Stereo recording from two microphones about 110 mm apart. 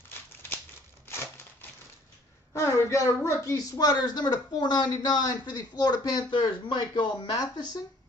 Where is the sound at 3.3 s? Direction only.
30° left (ahead or behind).